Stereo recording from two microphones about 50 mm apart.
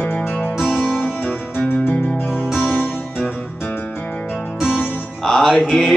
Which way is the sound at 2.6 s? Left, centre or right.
Left.